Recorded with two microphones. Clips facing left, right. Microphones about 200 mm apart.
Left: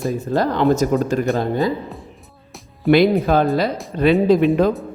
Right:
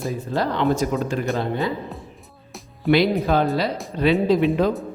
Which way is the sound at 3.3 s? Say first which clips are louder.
Left 3 dB; 50° left (ahead or behind).